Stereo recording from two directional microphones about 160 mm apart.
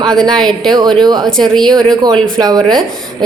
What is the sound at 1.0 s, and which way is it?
A woman's voice, 25° right (ahead or behind).